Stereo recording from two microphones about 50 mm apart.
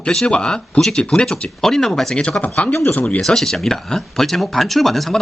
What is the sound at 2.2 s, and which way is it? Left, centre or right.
Speech, left.